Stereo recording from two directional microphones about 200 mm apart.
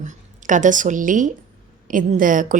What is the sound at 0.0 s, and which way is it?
A woman's voice, 40° right (ahead or behind).